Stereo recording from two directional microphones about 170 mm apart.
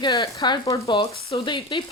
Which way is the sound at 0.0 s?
20° left (ahead or behind).